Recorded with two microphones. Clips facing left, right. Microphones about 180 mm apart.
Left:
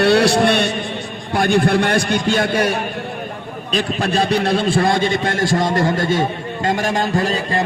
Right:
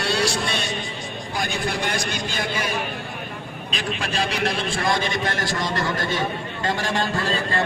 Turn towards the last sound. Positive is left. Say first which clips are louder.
# left 5 dB
turn(degrees=15)  # may be behind; listen again after turning